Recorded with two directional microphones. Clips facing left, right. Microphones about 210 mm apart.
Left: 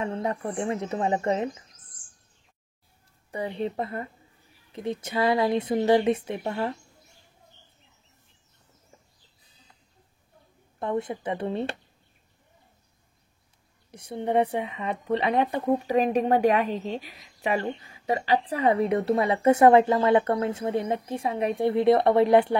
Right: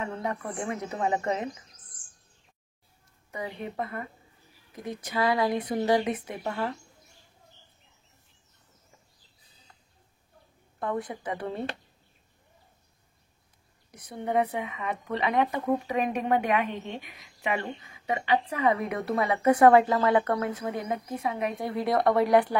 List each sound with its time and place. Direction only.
0.0 s speech: 30° left (ahead or behind)
3.3 s speech: 30° left (ahead or behind)
10.8 s speech: 25° left (ahead or behind)
13.9 s speech: 30° left (ahead or behind)